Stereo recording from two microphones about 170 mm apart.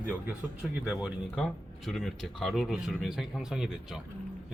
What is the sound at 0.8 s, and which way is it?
Speech, 5° right (ahead or behind).